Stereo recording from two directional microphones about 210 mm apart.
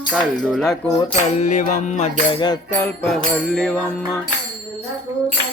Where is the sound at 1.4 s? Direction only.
35° left (ahead or behind).